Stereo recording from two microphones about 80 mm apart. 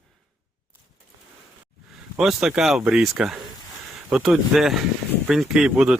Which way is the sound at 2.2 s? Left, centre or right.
Centre.